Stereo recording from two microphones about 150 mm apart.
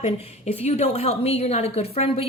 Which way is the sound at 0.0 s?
45° left (ahead or behind).